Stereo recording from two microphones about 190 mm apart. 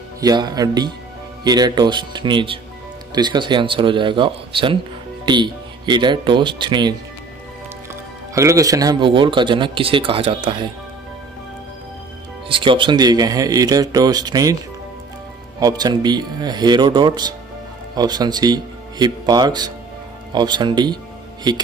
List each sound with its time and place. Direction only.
0.2 s speech: 20° right (ahead or behind)
12.4 s speech: 25° right (ahead or behind)
15.6 s speech: 20° right (ahead or behind)